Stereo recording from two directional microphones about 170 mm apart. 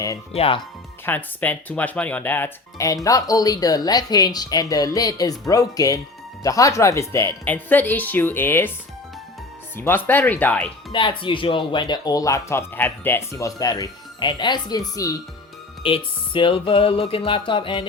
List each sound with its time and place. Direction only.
0.3 s speech: 35° left (ahead or behind)
1.0 s speech: 10° left (ahead or behind)
9.7 s speech: 10° left (ahead or behind)
10.9 s speech: 30° left (ahead or behind)
15.8 s speech: 30° left (ahead or behind)